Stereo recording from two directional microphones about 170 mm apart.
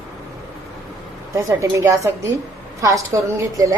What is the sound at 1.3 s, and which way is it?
A woman's voice, 15° right (ahead or behind).